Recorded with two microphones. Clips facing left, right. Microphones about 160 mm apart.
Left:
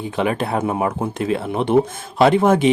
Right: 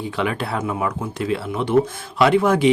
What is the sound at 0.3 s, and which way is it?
Speech, 20° left (ahead or behind).